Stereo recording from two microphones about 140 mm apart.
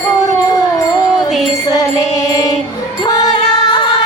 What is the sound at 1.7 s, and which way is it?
Music, 25° left (ahead or behind).